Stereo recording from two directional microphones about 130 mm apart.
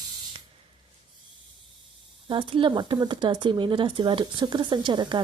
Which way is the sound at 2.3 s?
40° right (ahead or behind).